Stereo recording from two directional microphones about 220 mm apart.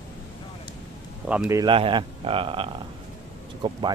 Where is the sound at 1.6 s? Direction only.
25° right (ahead or behind).